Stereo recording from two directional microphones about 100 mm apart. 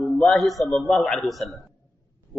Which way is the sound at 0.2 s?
Centre (ahead or behind).